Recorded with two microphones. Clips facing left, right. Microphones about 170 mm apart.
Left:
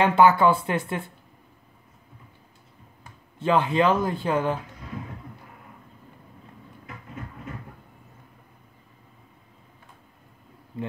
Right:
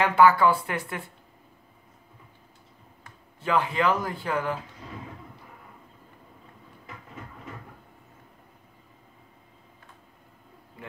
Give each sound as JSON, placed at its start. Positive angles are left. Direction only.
{"t": 0.0, "sound": "speech", "side_deg": 25}
{"t": 3.3, "sound": "speech", "side_deg": 25}